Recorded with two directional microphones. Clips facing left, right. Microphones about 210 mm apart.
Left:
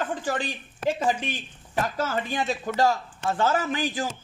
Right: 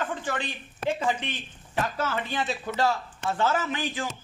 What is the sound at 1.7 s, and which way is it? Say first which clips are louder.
A man's voice: left 2 dB; 40° left (ahead or behind).